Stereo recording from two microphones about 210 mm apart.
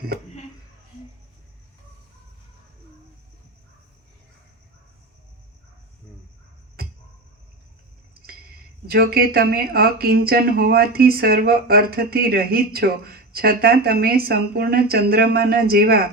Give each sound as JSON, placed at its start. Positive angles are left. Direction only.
{"t": 8.9, "sound": "speech", "side_deg": -45}